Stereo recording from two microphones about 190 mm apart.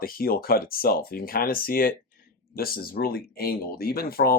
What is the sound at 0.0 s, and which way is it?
Speech, 50° left (ahead or behind).